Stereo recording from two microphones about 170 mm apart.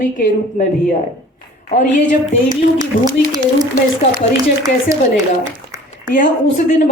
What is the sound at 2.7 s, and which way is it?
Speech, 25° right (ahead or behind).